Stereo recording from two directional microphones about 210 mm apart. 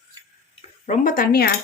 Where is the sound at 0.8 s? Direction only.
35° left (ahead or behind).